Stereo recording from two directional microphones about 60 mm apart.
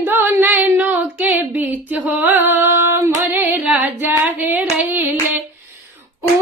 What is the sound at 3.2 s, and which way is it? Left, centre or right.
Child singing, right.